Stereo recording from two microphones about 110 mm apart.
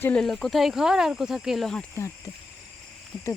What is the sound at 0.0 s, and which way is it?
Speech, 5° left (ahead or behind).